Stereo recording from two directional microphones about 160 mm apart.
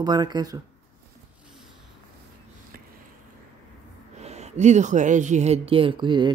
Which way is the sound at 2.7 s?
65° right (ahead or behind).